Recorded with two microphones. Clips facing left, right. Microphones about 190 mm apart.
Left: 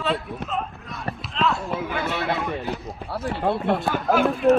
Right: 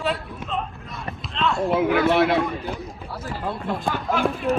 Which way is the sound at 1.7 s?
70° right (ahead or behind).